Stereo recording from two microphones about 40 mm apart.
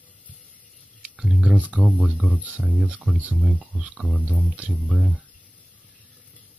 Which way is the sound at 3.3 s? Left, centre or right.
Centre.